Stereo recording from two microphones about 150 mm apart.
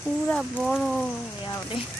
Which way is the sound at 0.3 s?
5° left (ahead or behind).